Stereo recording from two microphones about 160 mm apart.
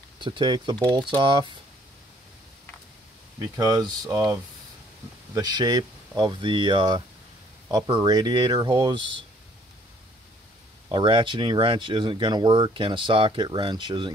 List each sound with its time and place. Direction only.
0.2 s speech: 30° right (ahead or behind)
3.3 s speech: 20° right (ahead or behind)
5.3 s speech: 25° right (ahead or behind)
10.9 s speech: 30° right (ahead or behind)